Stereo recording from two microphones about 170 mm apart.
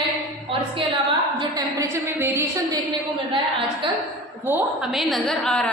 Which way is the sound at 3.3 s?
30° right (ahead or behind).